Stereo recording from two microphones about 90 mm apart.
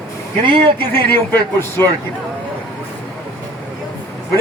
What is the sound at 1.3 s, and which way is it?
Speech, 20° left (ahead or behind).